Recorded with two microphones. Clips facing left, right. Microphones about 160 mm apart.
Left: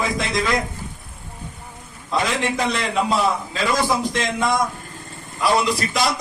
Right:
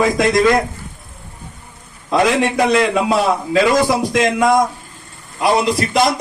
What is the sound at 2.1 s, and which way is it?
A man's voice, 70° right (ahead or behind).